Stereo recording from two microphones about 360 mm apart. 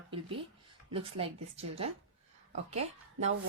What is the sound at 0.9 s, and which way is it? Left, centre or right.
Speech, centre.